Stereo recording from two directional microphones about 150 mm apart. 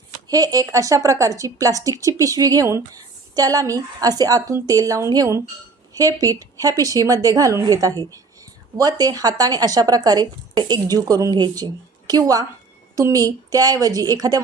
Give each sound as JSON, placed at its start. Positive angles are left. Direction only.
{"t": 0.3, "sound": "a woman's voice", "side_deg": -25}